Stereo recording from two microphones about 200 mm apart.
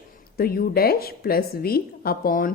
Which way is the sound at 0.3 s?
50° left (ahead or behind).